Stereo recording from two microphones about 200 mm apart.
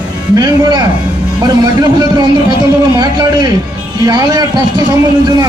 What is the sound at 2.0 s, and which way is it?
A man's voice, 20° right (ahead or behind).